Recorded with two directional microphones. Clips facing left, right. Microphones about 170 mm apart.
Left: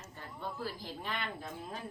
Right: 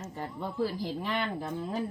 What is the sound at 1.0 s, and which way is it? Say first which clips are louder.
Speech: right 5 dB; 85° right.